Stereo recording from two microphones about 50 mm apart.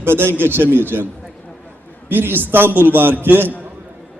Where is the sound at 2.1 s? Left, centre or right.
Right.